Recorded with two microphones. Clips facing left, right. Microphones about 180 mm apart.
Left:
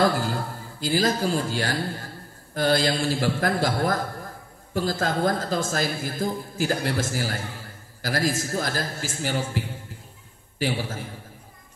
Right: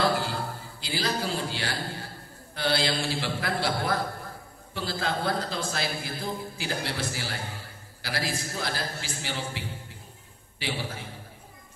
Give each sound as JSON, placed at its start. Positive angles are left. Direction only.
{"t": 0.0, "sound": "a man's voice", "side_deg": 45}